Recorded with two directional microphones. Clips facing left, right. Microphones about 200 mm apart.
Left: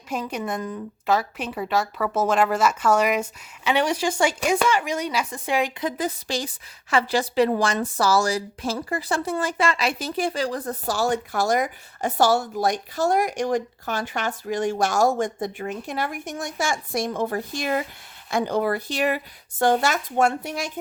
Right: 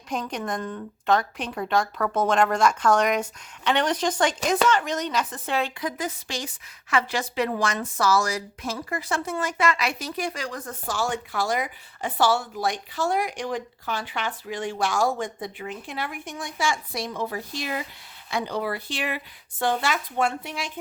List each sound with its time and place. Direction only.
0.1 s a woman's voice: 5° left (ahead or behind)
5.8 s a woman's voice: 35° left (ahead or behind)